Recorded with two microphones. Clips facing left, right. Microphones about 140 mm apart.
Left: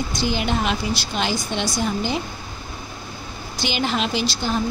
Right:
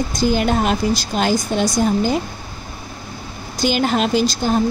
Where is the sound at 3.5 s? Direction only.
45° right (ahead or behind).